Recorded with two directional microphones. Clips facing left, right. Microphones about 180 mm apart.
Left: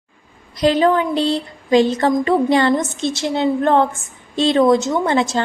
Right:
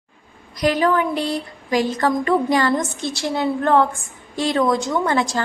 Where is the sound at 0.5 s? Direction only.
25° left (ahead or behind).